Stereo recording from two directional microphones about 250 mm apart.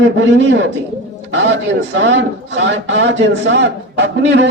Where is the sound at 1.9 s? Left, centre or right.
Right.